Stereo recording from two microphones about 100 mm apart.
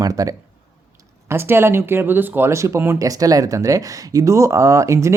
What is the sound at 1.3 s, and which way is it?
Speech, 25° right (ahead or behind).